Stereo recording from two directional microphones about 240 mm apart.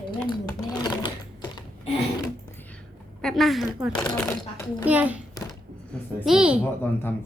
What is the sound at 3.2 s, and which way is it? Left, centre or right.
A child's voice, centre.